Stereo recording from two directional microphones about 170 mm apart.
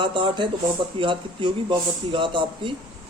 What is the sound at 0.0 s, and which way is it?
Speech, 30° right (ahead or behind).